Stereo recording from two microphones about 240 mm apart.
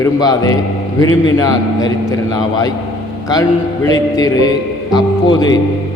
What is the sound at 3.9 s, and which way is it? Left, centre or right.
A man's voice, centre.